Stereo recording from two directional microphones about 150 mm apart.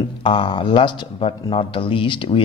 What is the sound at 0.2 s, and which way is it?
Speech, 35° left (ahead or behind).